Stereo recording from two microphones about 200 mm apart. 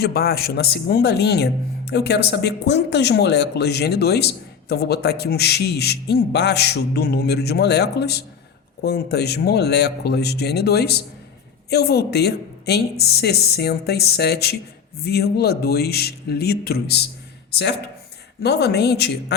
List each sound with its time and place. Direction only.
0.0 s a woman's voice: 50° left (ahead or behind)